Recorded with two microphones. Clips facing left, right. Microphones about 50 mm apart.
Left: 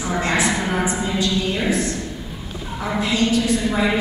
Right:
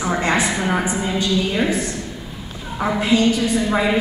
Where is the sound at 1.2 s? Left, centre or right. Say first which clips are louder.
Right 3 dB; centre.